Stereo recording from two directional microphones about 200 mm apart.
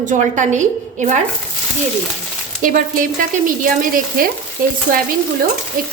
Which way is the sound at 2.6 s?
40° right (ahead or behind).